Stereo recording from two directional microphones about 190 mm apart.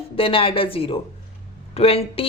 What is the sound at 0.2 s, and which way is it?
A woman's voice, 30° left (ahead or behind).